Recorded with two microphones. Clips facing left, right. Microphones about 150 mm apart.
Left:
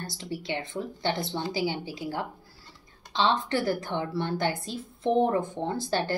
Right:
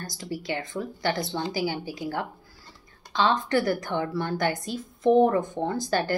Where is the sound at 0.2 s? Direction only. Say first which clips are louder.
Right 2 dB; 25° left (ahead or behind).